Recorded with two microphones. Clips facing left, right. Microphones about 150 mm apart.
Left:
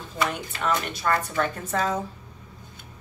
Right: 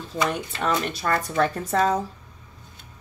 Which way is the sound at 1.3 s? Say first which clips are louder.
Right 4 dB; 35° right (ahead or behind).